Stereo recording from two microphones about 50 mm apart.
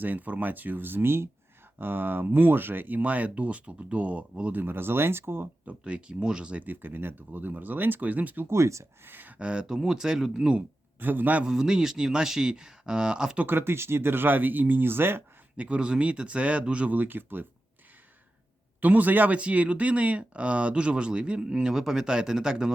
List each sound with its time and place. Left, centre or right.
0.0 s speech: right
4.5 s speech: right
5.6 s speech: right
6.7 s speech: right
8.4 s speech: right
9.0 s speech: right
9.4 s speech: centre
11.0 s speech: right
11.4 s speech: centre
13.5 s speech: right
15.5 s speech: right
18.8 s speech: right
19.4 s speech: right